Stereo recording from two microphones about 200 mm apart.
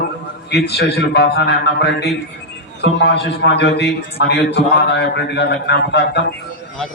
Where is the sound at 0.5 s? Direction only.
55° left (ahead or behind).